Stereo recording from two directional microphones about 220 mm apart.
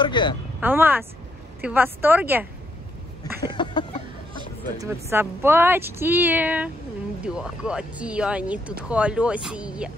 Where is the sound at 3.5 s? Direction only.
20° left (ahead or behind).